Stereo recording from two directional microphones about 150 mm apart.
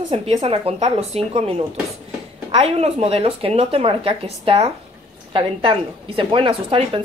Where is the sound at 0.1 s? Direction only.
40° right (ahead or behind).